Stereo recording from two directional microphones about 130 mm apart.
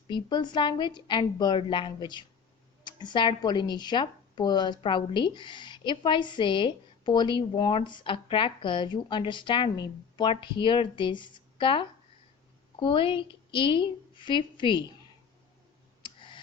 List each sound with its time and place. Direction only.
0.1 s a woman's voice: 35° left (ahead or behind)
16.0 s tick: 40° left (ahead or behind)